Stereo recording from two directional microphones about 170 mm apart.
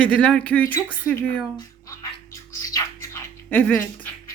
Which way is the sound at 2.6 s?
20° left (ahead or behind).